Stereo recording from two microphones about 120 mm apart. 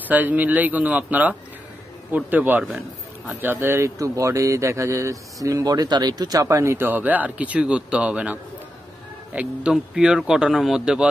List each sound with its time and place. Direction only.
0.1 s speech: 15° right (ahead or behind)